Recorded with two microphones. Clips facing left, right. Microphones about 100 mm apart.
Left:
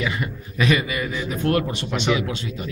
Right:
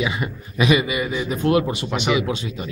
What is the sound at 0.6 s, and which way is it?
A man's voice, 15° right (ahead or behind).